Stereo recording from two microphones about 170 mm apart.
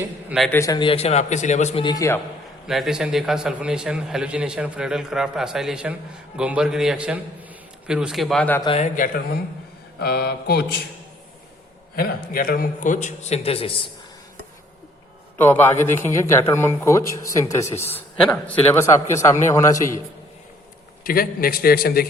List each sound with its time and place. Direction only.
0.3 s a man's voice: centre (ahead or behind)
0.5 s a man's voice: 15° left (ahead or behind)
0.8 s a man's voice: 35° left (ahead or behind)
1.8 s a man's voice: 20° left (ahead or behind)
2.6 s a man's voice: centre (ahead or behind)
8.8 s a man's voice: 50° left (ahead or behind)
10.0 s mantra: 70° left (ahead or behind)
11.9 s a man's voice: 60° left (ahead or behind); by 13.7 s 35° left (ahead or behind)
15.4 s a man's voice: 15° left (ahead or behind)
21.0 s a man's voice: 60° left (ahead or behind)